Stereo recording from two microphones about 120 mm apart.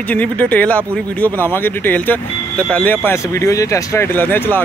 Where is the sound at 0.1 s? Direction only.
15° left (ahead or behind).